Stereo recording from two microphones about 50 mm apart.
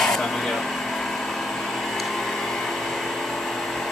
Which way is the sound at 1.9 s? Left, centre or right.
Centre.